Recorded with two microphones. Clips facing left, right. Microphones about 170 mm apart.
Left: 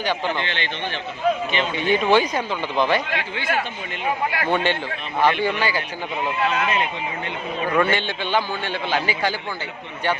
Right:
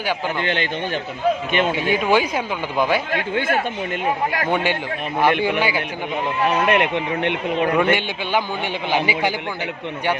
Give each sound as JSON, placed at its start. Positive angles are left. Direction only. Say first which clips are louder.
{"t": 0.4, "sound": "speech", "louder": "right 6 dB", "side_deg": -45}
{"t": 1.7, "sound": "a man's voice", "louder": "left 3 dB", "side_deg": -10}
{"t": 3.1, "sound": "speech", "louder": "right 5 dB", "side_deg": -45}
{"t": 4.5, "sound": "a man's voice", "louder": "right 1 dB", "side_deg": -10}
{"t": 6.7, "sound": "speech", "louder": "right 6 dB", "side_deg": -70}
{"t": 7.8, "sound": "a man's voice", "louder": "right 2 dB", "side_deg": -10}